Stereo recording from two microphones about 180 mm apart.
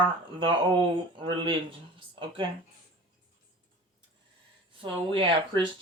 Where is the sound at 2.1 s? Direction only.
25° right (ahead or behind).